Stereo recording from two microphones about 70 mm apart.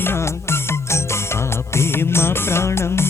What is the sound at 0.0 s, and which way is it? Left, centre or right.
Music, left.